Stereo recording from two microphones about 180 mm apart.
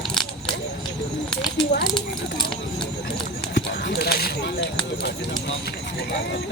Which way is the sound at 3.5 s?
60° left (ahead or behind).